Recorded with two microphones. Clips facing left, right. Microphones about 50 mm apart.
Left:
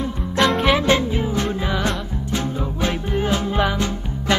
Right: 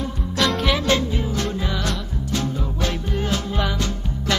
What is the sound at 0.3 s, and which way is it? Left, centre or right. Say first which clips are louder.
Music: left 4 dB; left.